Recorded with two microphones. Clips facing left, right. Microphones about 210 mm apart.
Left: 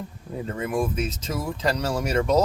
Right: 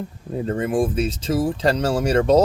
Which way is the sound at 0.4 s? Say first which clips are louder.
Right 5 dB; 35° right (ahead or behind).